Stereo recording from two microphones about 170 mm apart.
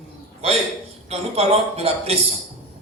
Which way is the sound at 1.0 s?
40° right (ahead or behind).